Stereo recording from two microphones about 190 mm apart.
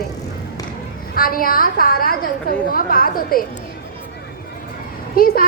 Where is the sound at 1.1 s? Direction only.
50° left (ahead or behind).